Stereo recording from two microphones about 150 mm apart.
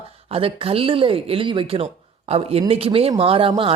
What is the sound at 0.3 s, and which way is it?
Speech, 40° right (ahead or behind).